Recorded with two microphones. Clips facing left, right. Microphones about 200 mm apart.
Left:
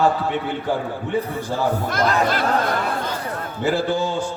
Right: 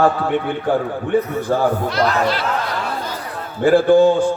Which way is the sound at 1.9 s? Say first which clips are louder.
Right 2 dB; 50° left (ahead or behind).